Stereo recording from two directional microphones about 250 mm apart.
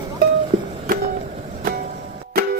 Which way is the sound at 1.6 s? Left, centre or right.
Right.